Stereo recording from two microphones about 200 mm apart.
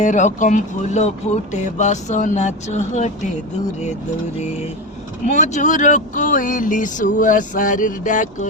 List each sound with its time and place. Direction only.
0.0 s speech: 40° left (ahead or behind)
5.2 s speech: 35° left (ahead or behind)